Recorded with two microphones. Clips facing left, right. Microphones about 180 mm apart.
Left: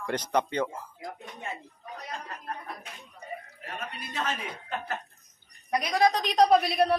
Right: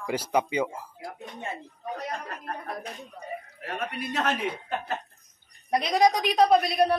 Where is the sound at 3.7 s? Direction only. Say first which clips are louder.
Right 5 dB; 65° right (ahead or behind).